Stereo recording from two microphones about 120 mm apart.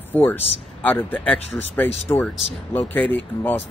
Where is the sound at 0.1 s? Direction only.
15° left (ahead or behind).